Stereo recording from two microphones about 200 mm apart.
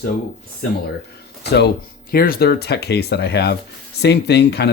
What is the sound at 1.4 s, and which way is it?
Speech, 55° left (ahead or behind).